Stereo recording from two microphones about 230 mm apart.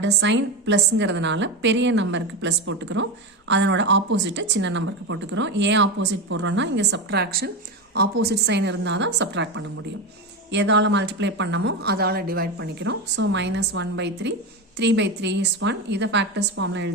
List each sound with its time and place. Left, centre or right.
0.0 s speech: right